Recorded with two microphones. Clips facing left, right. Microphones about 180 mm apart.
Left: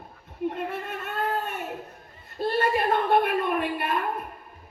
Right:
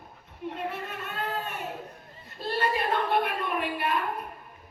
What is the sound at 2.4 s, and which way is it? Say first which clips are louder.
Speech: left 4 dB; 50° left (ahead or behind).